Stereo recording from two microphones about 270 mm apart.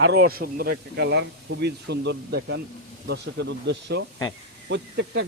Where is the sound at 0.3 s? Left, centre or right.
Right.